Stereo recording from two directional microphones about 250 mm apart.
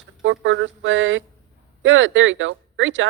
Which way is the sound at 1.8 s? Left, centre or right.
Right.